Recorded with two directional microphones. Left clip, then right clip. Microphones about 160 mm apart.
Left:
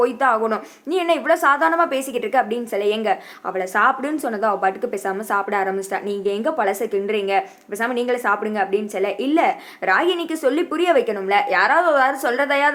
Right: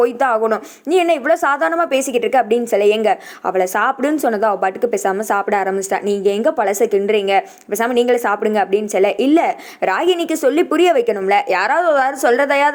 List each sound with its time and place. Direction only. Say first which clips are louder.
0.0 s speech: right 3 dB; 40° right (ahead or behind)